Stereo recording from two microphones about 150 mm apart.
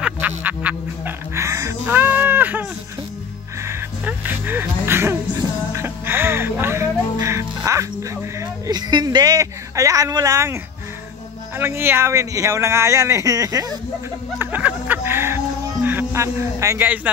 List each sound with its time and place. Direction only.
0.4 s music: 10° right (ahead or behind)
11.5 s speech: 15° right (ahead or behind)
14.4 s music: 10° right (ahead or behind)